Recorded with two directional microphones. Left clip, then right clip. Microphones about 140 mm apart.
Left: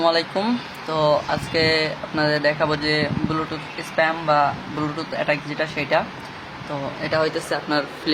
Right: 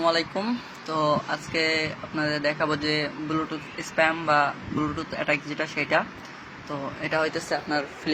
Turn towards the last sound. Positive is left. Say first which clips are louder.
# left 4 dB
turn(degrees=-20)  # may be behind; listen again after turning